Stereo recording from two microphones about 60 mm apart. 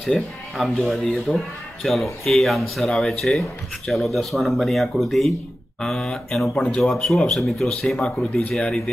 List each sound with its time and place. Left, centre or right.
0.0 s speech: centre
5.8 s speech: centre
6.8 s speech: centre
8.0 s speech: centre